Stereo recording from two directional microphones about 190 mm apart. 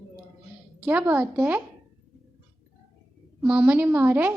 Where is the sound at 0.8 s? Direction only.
10° right (ahead or behind).